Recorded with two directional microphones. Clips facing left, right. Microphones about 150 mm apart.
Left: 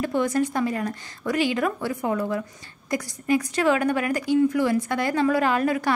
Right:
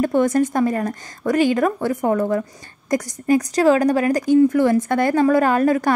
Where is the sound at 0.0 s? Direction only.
45° right (ahead or behind).